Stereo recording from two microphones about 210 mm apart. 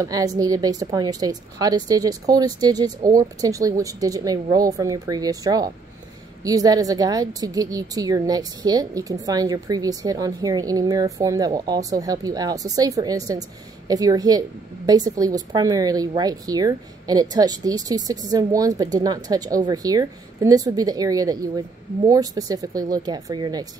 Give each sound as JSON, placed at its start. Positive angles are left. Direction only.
{"t": 0.0, "sound": "a woman's voice", "side_deg": -15}